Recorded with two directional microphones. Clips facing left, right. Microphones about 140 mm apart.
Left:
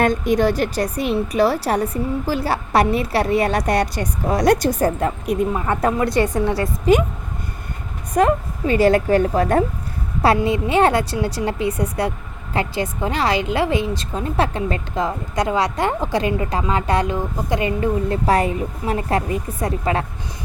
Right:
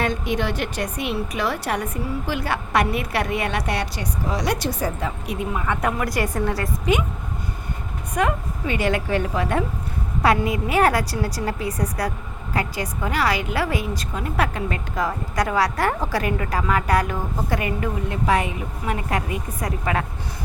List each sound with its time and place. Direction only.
0.0 s a woman's voice: 45° left (ahead or behind)
5.5 s a woman's voice: 35° left (ahead or behind)
6.6 s a woman's voice: 35° left (ahead or behind)
8.1 s a woman's voice: 35° left (ahead or behind)
10.2 s a woman's voice: 25° left (ahead or behind)